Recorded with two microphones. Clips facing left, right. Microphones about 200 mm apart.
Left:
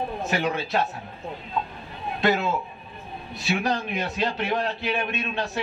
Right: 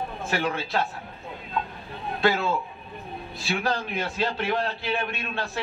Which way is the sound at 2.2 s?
20° left (ahead or behind).